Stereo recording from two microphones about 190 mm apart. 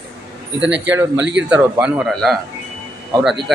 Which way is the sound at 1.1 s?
70° right (ahead or behind).